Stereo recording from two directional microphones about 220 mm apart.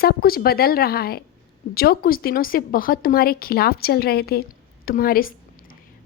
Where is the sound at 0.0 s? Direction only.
45° left (ahead or behind).